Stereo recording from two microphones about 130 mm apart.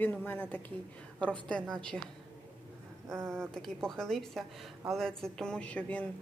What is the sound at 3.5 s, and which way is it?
A woman's voice, 5° left (ahead or behind).